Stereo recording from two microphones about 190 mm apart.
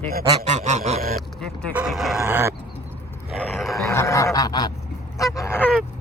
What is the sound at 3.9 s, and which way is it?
Goose, 15° left (ahead or behind).